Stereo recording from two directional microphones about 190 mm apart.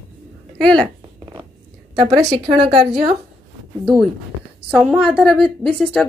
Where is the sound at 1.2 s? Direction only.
20° right (ahead or behind).